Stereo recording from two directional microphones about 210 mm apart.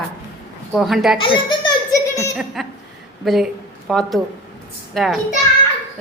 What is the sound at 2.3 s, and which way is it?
A woman's voice, centre (ahead or behind).